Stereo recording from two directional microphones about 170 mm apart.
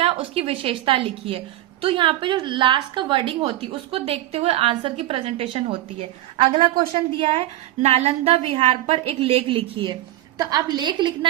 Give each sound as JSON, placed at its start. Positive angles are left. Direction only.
{"t": 0.0, "sound": "a woman's voice", "side_deg": -35}